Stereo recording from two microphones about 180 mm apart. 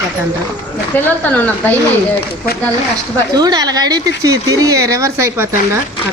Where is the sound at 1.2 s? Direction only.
10° left (ahead or behind).